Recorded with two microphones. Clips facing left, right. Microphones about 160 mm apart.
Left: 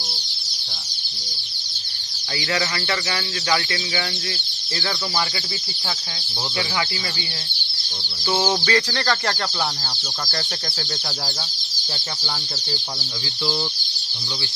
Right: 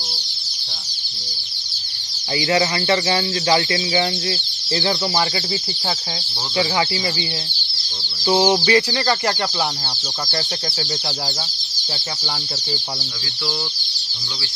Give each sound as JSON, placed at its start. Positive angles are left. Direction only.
{"t": 2.3, "sound": "speech", "side_deg": -25}
{"t": 8.3, "sound": "chicken", "side_deg": -15}